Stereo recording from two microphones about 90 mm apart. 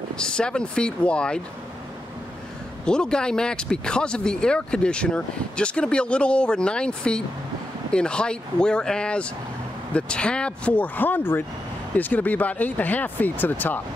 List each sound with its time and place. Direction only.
0.2 s speech: 10° left (ahead or behind)
2.8 s speech: 10° left (ahead or behind)